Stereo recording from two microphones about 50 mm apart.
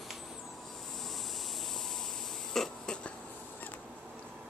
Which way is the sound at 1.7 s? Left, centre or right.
Centre.